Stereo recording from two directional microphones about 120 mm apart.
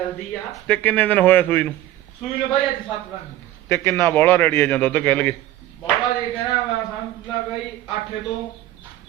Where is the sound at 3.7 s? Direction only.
20° left (ahead or behind).